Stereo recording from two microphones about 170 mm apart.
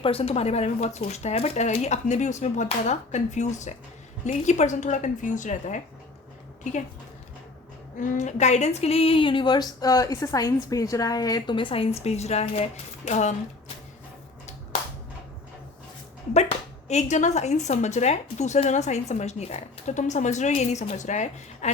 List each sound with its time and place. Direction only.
0.0 s speech: 35° left (ahead or behind)
7.9 s speech: 45° left (ahead or behind)
16.3 s speech: 40° left (ahead or behind)